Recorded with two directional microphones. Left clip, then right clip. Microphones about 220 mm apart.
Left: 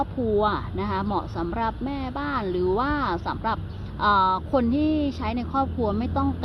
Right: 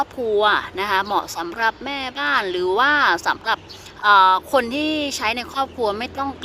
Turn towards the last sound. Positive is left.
turn(degrees=-20)  # may be behind; listen again after turning